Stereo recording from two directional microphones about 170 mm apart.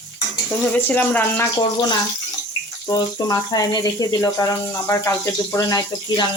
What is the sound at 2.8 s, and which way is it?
Speech, 20° left (ahead or behind).